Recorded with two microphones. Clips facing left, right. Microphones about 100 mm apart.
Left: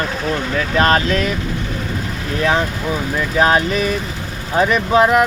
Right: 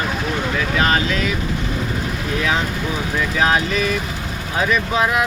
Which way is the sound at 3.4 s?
40° left (ahead or behind).